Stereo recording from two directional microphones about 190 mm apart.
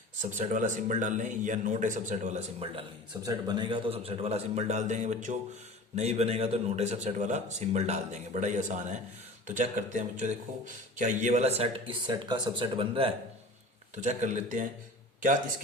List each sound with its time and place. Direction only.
0.2 s a man's voice: 40° right (ahead or behind)
3.2 s a man's voice: 20° right (ahead or behind)
13.9 s a man's voice: 40° right (ahead or behind)